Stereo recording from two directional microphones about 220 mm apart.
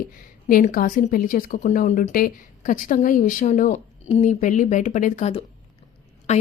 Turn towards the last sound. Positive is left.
turn(degrees=30)  # may be behind; listen again after turning